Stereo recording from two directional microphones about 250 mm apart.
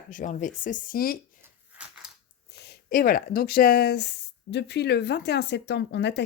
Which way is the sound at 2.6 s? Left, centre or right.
Left.